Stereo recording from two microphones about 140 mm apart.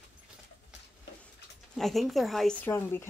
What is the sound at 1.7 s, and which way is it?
Speech, centre (ahead or behind).